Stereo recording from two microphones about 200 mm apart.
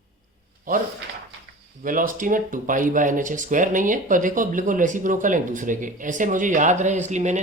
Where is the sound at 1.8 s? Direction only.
40° right (ahead or behind).